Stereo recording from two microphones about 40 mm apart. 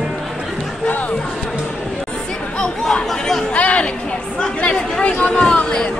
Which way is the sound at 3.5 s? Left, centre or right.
Left.